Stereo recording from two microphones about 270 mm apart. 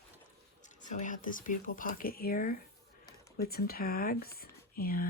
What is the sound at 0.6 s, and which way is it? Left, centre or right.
Speech, left.